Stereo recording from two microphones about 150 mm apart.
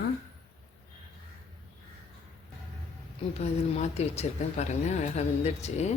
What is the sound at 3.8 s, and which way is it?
Speech, 45° left (ahead or behind).